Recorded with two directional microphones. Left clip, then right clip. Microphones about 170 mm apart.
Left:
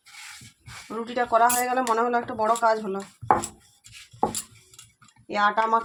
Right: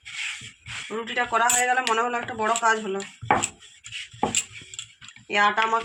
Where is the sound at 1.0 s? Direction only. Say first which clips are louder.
Left 2 dB; 80° left; by 3.0 s 65° left (ahead or behind).